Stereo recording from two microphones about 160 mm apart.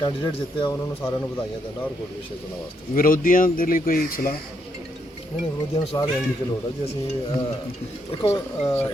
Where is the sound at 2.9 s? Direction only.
60° left (ahead or behind).